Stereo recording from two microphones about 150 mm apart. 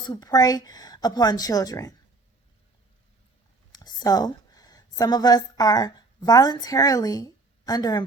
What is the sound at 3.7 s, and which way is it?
A woman's voice, 25° left (ahead or behind).